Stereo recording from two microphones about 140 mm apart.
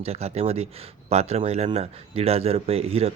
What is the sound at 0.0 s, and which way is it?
Speech, 45° right (ahead or behind).